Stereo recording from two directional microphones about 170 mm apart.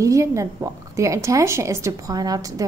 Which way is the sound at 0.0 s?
20° right (ahead or behind).